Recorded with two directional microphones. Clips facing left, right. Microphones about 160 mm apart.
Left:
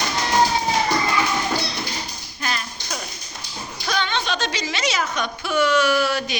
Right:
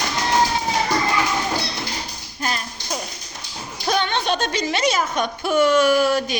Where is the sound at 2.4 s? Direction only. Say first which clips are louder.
Right 2 dB; 40° right (ahead or behind).